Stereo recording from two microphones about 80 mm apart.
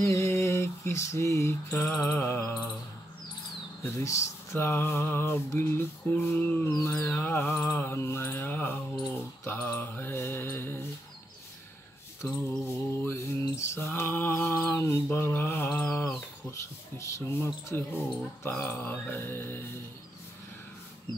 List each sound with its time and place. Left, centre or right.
0.0 s a sound: left
3.8 s speech: left
12.4 s mantra: left
16.4 s speech: left